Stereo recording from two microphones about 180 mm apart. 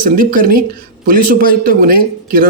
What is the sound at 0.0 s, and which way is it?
Speech, 50° right (ahead or behind).